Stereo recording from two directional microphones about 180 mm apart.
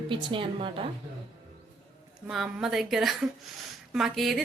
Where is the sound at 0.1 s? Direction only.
30° right (ahead or behind).